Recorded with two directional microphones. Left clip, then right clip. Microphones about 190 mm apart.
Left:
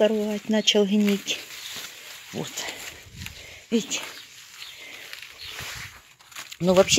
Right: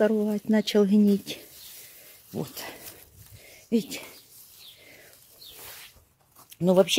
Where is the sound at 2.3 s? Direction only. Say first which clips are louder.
Left 3 dB; 10° right (ahead or behind).